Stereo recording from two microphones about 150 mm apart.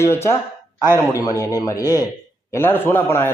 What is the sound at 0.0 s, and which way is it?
A man's voice, 15° left (ahead or behind).